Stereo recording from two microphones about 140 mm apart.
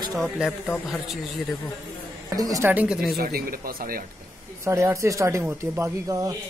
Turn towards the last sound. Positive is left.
turn(degrees=-15)  # may be behind; listen again after turning